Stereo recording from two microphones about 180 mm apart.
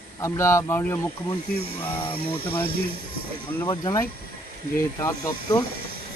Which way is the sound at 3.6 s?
20° left (ahead or behind).